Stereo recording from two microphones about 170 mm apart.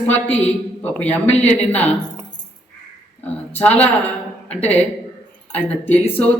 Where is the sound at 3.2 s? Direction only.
10° left (ahead or behind).